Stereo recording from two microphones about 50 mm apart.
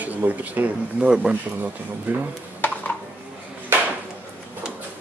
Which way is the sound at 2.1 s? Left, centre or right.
Right.